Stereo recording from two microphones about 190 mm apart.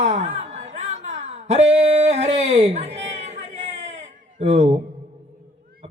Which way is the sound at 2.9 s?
35° right (ahead or behind).